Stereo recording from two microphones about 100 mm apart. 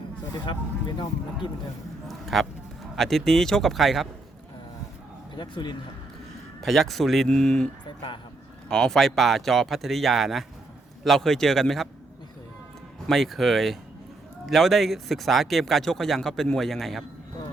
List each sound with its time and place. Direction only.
0.4 s speech: 50° left (ahead or behind)
2.0 s speech: centre (ahead or behind)
5.3 s speech: 50° left (ahead or behind)
6.6 s speech: centre (ahead or behind)
8.7 s speech: 5° left (ahead or behind)
13.1 s speech: centre (ahead or behind)